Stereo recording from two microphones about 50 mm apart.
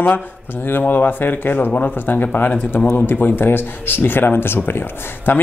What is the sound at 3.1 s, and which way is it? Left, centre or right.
Speech, left.